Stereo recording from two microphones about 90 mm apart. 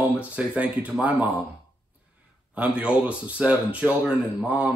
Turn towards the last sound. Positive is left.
turn(degrees=-15)  # may be behind; listen again after turning